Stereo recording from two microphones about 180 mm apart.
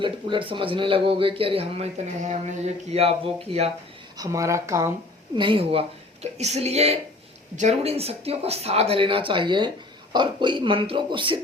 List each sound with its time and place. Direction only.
0.0 s speech: 25° right (ahead or behind)
4.2 s speech: 15° right (ahead or behind)
5.4 s speech: 30° right (ahead or behind)